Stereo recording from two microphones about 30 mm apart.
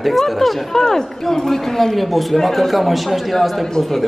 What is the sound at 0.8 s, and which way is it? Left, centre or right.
Speech, centre.